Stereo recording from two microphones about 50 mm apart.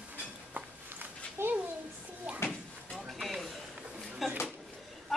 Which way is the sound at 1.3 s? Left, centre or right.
Right.